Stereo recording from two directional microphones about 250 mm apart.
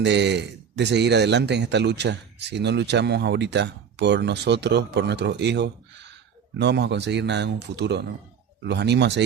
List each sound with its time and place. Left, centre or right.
0.0 s a man's voice: right